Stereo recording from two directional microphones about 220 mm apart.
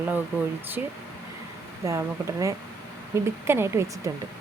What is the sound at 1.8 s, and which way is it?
A woman's voice, 15° right (ahead or behind).